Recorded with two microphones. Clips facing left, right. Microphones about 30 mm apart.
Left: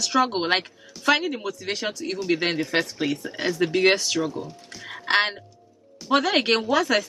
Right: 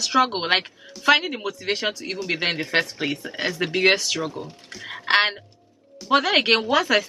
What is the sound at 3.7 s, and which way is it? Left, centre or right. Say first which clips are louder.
Speech: right 2 dB; centre.